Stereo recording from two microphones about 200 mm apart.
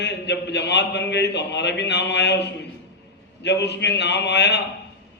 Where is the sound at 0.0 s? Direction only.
60° left (ahead or behind).